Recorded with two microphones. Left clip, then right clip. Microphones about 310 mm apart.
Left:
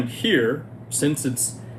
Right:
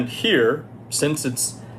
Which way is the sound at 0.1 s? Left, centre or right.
Centre.